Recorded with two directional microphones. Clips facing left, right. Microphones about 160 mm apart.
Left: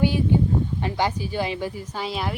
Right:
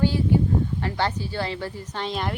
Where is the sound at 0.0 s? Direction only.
15° left (ahead or behind).